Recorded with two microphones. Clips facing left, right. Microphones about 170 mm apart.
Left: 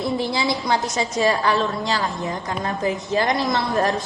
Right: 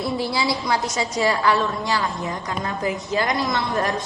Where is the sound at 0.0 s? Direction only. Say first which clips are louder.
Left 1 dB; 20° left (ahead or behind).